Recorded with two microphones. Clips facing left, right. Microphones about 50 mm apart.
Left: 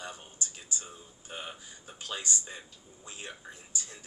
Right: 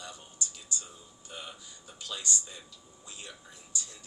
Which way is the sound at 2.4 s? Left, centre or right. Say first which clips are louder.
Left 3 dB; left.